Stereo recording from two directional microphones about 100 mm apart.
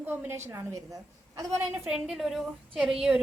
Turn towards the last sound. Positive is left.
turn(degrees=-5)  # may be behind; listen again after turning